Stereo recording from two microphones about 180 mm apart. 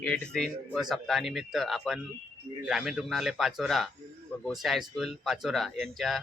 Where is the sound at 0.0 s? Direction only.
5° left (ahead or behind).